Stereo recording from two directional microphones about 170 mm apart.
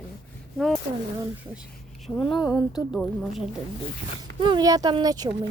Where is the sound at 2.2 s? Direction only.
25° left (ahead or behind).